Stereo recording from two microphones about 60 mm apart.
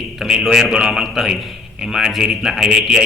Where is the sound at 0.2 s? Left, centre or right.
Centre.